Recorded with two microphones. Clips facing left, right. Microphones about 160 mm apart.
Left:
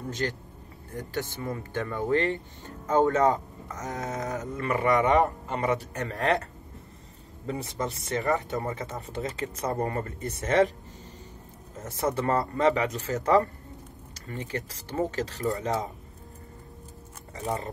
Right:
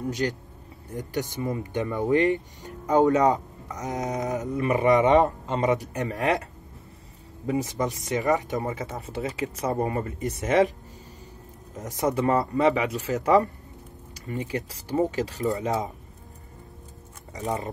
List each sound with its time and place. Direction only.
0.1 s speech: 15° right (ahead or behind)
11.7 s speech: 15° right (ahead or behind)